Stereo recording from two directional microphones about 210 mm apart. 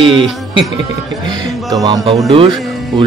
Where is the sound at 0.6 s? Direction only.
25° right (ahead or behind).